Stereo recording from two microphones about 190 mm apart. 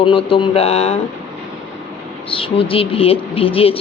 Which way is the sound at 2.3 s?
30° left (ahead or behind).